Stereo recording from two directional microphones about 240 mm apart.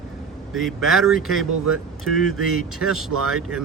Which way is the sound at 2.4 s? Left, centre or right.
Right.